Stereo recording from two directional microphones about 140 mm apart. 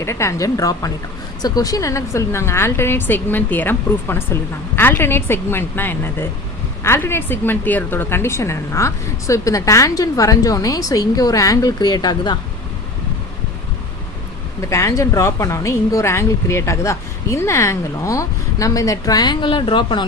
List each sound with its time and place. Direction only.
0.0 s a woman's voice: 20° left (ahead or behind)
14.6 s a woman's voice: 20° left (ahead or behind)